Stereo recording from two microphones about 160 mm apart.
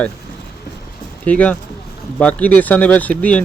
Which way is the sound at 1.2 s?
10° left (ahead or behind).